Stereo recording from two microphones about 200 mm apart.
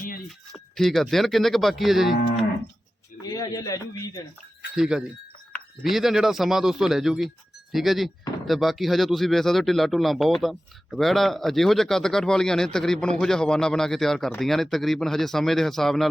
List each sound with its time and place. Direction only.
0.5 s speech: centre (ahead or behind)
3.3 s speech: 15° left (ahead or behind)
4.7 s speech: 5° right (ahead or behind)